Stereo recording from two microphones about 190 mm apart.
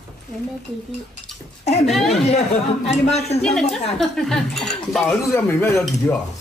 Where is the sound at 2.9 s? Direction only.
35° left (ahead or behind).